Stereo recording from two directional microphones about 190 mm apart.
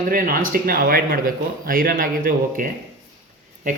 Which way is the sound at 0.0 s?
50° right (ahead or behind).